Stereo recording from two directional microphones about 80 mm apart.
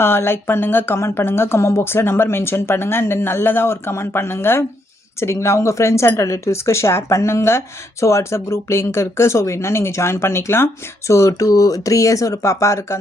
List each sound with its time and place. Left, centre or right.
0.0 s speech: left